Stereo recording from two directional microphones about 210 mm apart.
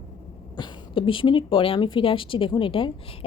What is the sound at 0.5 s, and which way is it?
Speech, 25° left (ahead or behind).